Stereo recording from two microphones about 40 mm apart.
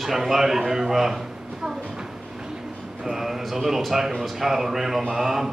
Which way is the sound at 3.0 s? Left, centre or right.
Centre.